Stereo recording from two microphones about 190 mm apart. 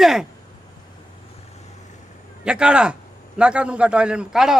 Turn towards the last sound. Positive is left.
turn(degrees=-5)  # may be behind; listen again after turning